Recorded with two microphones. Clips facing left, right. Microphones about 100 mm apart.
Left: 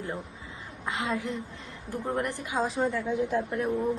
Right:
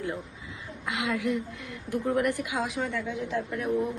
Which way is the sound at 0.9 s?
30° left (ahead or behind).